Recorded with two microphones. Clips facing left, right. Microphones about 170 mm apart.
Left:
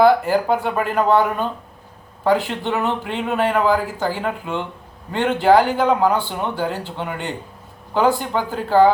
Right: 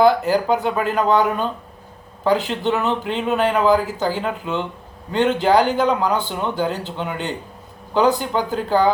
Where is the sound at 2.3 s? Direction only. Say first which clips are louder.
Even; centre (ahead or behind).